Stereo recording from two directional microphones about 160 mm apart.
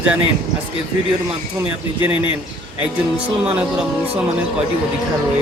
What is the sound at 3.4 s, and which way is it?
Speech, 10° right (ahead or behind).